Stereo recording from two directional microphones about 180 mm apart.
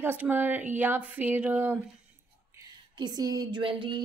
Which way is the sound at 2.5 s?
25° right (ahead or behind).